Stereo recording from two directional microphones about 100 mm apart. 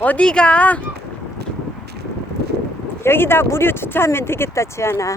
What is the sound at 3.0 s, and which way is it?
Speech, 25° left (ahead or behind).